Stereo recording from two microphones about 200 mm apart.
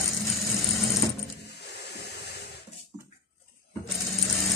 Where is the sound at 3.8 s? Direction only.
Centre (ahead or behind).